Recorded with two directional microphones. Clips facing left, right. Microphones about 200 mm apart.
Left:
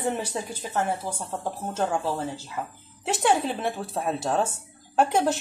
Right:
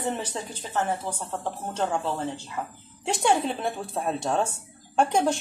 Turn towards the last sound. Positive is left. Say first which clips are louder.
# even
turn(degrees=5)  # may be behind; listen again after turning